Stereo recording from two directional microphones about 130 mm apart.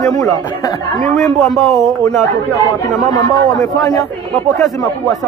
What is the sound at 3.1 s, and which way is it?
Speech, 25° left (ahead or behind).